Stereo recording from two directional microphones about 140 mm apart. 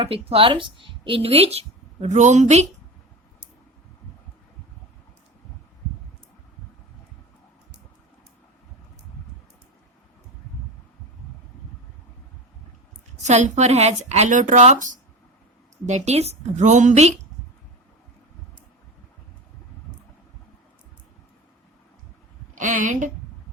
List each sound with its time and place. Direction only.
0.0 s speech: 40° right (ahead or behind); by 2.6 s 55° right (ahead or behind)
13.2 s speech: 55° right (ahead or behind)
15.9 s speech: 50° right (ahead or behind)
22.5 s speech: 65° right (ahead or behind)